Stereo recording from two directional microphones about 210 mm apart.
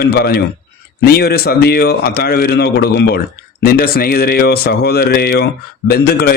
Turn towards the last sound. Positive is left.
turn(degrees=50)  # may be behind; listen again after turning